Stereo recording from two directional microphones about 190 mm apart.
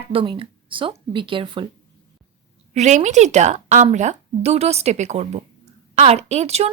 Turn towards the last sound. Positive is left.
turn(degrees=-35)  # may be behind; listen again after turning